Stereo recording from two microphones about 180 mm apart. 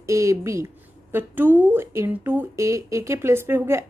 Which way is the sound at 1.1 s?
10° right (ahead or behind).